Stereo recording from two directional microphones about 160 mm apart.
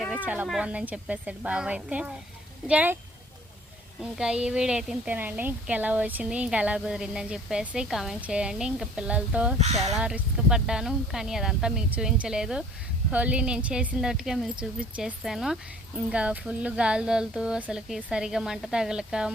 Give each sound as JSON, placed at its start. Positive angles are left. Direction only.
{"t": 0.2, "sound": "a woman's voice", "side_deg": -10}
{"t": 4.0, "sound": "a woman's voice", "side_deg": -5}
{"t": 9.6, "sound": "speech", "side_deg": -40}
{"t": 10.0, "sound": "a woman's voice", "side_deg": -5}